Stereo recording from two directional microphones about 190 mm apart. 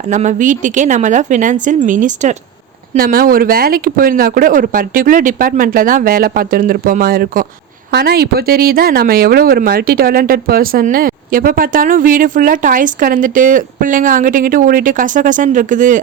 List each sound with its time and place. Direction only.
0.1 s speech: 40° right (ahead or behind)